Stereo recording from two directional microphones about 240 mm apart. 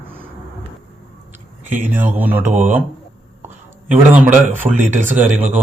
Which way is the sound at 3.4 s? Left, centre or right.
Centre.